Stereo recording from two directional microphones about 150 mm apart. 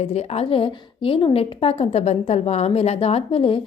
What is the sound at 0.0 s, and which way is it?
A woman's voice, 45° left (ahead or behind).